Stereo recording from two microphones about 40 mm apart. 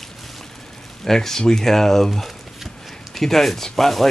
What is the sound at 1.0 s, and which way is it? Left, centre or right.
Speech, centre.